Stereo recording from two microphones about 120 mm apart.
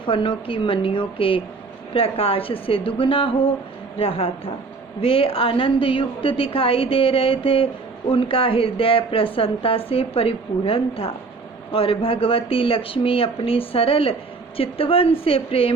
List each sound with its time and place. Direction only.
0.0 s speech: 45° left (ahead or behind)